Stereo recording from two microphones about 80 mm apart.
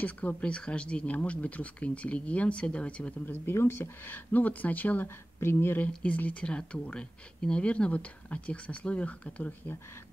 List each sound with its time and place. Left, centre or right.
0.0 s speech: centre
3.3 s speech: left
6.0 s speech: centre